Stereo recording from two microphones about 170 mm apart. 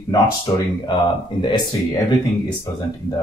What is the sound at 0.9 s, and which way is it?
Speech, 30° left (ahead or behind).